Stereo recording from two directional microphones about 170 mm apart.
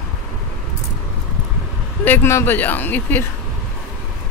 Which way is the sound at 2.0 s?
10° left (ahead or behind).